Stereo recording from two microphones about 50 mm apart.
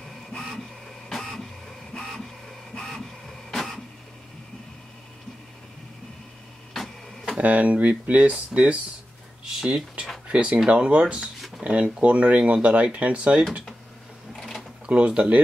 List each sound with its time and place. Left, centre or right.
1.0 s printer: centre
3.5 s a sound: centre
6.7 s printer: centre
7.3 s speech: right
9.4 s speech: centre
10.2 s speech: right
14.9 s speech: right